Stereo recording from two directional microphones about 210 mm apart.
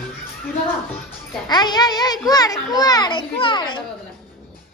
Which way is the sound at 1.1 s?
20° left (ahead or behind).